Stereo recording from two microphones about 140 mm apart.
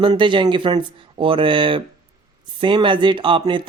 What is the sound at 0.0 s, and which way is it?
Speech, 35° right (ahead or behind).